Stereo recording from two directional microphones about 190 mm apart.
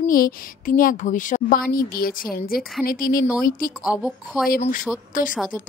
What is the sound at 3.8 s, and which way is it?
Speech, 5° right (ahead or behind).